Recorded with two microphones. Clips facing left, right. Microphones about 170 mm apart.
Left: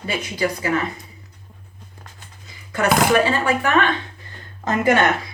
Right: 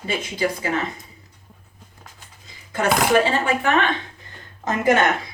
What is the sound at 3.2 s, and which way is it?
Speech, 25° right (ahead or behind).